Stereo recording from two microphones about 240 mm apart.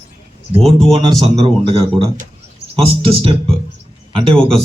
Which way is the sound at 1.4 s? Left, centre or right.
Right.